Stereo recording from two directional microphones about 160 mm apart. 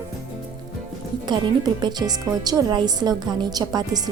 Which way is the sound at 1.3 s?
25° right (ahead or behind).